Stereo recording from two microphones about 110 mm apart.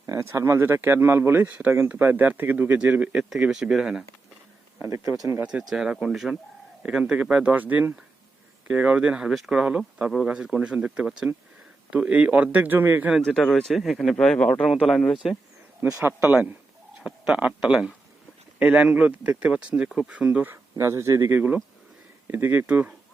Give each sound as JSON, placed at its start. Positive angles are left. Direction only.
{"t": 0.0, "sound": "speech", "side_deg": -25}
{"t": 4.8, "sound": "speech", "side_deg": -30}
{"t": 5.4, "sound": "speech", "side_deg": -10}
{"t": 13.1, "sound": "speech", "side_deg": 5}
{"t": 15.8, "sound": "speech", "side_deg": -15}